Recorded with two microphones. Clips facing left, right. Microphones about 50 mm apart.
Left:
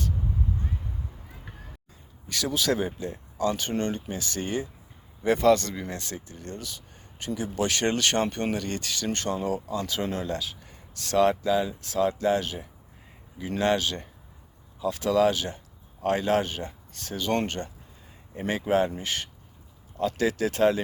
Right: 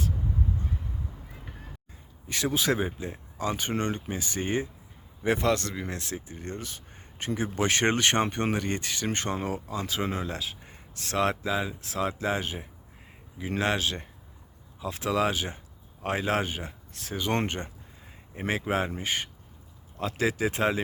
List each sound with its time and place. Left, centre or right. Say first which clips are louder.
2.2 s a man's voice: even; right
5.5 s speech: left 6 dB; centre
6.2 s speech: right 1 dB; right; by 17.2 s centre
17.2 s speech: left 2 dB; right
18.9 s speech: right 1 dB; right
20.0 s speech: left 2 dB; centre